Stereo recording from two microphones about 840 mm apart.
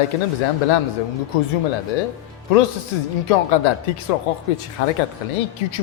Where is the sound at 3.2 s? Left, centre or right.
Left.